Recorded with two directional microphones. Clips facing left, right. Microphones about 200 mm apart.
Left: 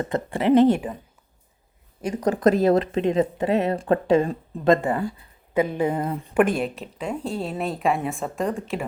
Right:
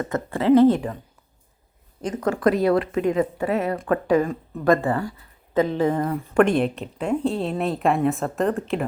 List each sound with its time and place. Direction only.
0.3 s speech: 15° left (ahead or behind)
2.0 s speech: 15° left (ahead or behind)
6.3 s a woman's voice: centre (ahead or behind)